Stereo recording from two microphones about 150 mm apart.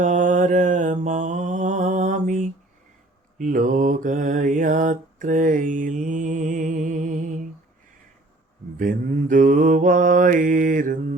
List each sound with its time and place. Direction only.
0.0 s mantra: 55° right (ahead or behind)
8.8 s mantra: 60° right (ahead or behind)